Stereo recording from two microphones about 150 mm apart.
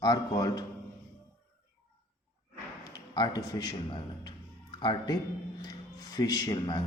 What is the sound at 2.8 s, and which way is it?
A man's voice, 30° left (ahead or behind).